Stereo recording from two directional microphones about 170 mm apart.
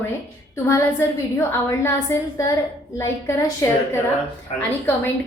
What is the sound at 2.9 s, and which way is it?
Speech, 15° left (ahead or behind).